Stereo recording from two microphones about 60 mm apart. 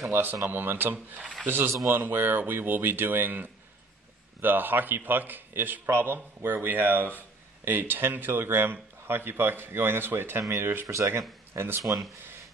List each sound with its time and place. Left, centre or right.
0.1 s speech: right